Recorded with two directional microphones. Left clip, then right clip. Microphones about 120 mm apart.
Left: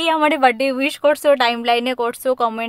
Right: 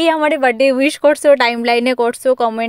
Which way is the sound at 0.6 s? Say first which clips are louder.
Right 6 dB; 30° right (ahead or behind).